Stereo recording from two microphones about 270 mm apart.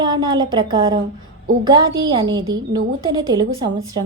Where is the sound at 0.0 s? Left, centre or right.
Centre.